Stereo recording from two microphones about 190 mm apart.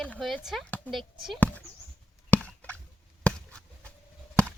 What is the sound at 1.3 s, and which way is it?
Basketball bounce, 10° left (ahead or behind).